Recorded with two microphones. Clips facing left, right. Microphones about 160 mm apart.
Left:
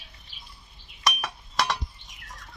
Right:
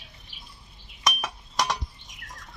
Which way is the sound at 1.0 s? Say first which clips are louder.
Even; centre (ahead or behind).